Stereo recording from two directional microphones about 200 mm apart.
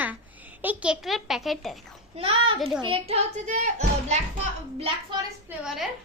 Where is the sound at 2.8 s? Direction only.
30° right (ahead or behind).